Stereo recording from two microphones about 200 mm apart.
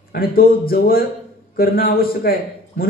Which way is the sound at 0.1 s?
50° left (ahead or behind).